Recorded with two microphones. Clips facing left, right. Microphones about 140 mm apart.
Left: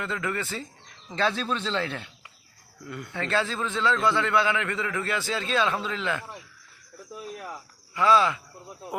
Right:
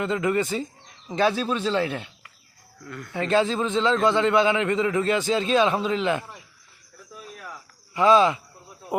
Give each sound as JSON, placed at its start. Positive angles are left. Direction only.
{"t": 0.0, "sound": "speech", "side_deg": -20}
{"t": 2.8, "sound": "speech", "side_deg": 15}
{"t": 3.1, "sound": "a man's voice", "side_deg": -15}
{"t": 7.9, "sound": "a man's voice", "side_deg": -20}